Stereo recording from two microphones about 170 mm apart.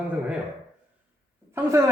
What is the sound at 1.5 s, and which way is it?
Speech, 15° right (ahead or behind).